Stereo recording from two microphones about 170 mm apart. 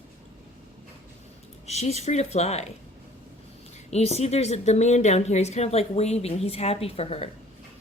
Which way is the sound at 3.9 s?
40° left (ahead or behind).